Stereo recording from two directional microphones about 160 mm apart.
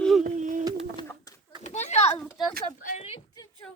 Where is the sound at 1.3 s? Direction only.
25° left (ahead or behind).